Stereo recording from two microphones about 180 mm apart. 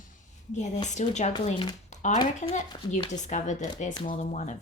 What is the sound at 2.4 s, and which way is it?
A woman's voice, 40° left (ahead or behind).